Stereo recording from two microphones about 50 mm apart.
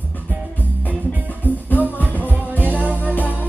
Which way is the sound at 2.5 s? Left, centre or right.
Left.